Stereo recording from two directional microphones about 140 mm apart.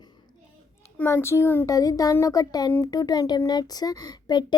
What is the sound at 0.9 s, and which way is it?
A child's voice, 15° left (ahead or behind).